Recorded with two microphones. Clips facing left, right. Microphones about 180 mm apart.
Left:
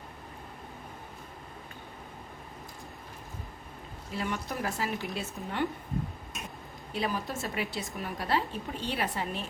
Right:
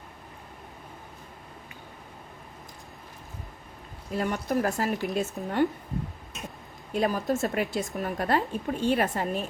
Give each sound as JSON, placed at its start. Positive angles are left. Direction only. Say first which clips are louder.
{"t": 4.1, "sound": "speech", "louder": "right 7 dB", "side_deg": -45}
{"t": 6.9, "sound": "speech", "louder": "right 7 dB", "side_deg": -45}